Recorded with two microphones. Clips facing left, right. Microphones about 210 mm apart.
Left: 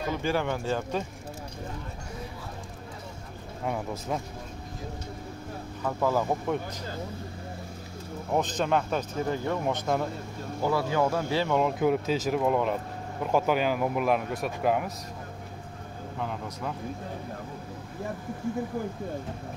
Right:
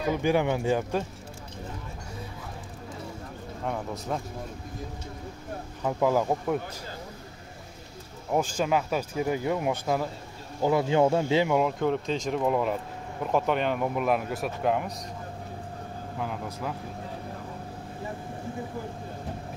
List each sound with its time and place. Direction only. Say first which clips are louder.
0.1 s speech: right 4 dB; 15° right (ahead or behind)
3.6 s speech: left 1 dB; 5° left (ahead or behind)
5.9 s speech: right 2 dB; 15° right (ahead or behind)
8.3 s speech: right 1 dB; 10° right (ahead or behind)
10.6 s speech: right 4 dB; 20° right (ahead or behind)
11.8 s speech: left 2 dB; 5° left (ahead or behind)
16.2 s speech: right 1 dB; 5° right (ahead or behind)